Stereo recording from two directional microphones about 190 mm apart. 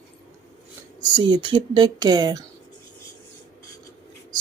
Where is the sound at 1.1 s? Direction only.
25° right (ahead or behind).